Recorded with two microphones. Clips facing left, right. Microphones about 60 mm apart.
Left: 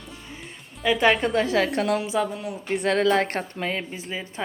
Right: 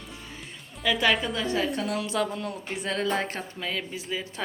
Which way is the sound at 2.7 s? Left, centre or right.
Left.